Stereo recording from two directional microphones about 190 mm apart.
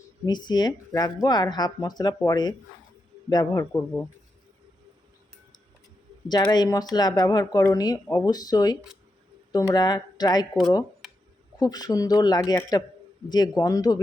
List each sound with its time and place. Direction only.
0.3 s speech: 20° left (ahead or behind)
6.2 s speech: 20° left (ahead or behind)
11.6 s speech: 20° left (ahead or behind)